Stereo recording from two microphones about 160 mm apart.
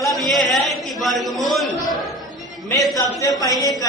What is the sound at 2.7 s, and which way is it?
A man's voice, 20° left (ahead or behind).